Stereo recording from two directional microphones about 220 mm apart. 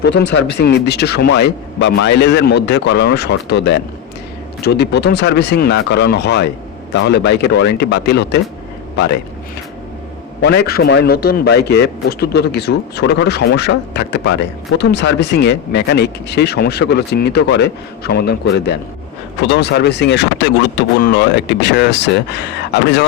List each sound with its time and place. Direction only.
0.0 s a man's voice: 50° left (ahead or behind)
10.4 s a man's voice: 50° left (ahead or behind)